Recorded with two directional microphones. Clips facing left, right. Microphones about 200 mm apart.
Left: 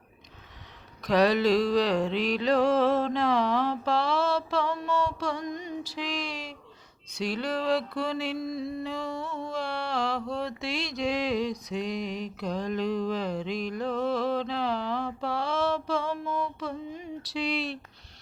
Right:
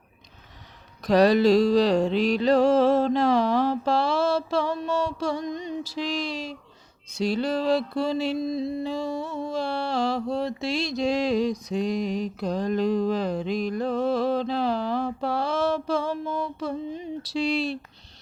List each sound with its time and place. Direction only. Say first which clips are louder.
1.0 s music: right 5 dB; 35° right (ahead or behind)
7.2 s mantra: right 5 dB; 30° right (ahead or behind)